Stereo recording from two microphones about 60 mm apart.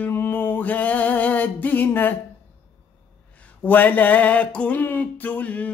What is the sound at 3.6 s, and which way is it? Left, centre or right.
Music, left.